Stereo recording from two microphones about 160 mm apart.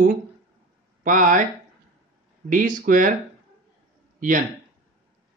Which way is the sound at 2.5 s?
55° right (ahead or behind).